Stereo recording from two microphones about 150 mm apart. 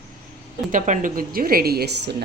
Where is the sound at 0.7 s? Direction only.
60° right (ahead or behind); by 2.2 s 90° right.